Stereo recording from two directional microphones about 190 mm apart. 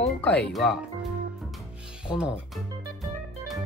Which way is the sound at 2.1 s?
5° right (ahead or behind).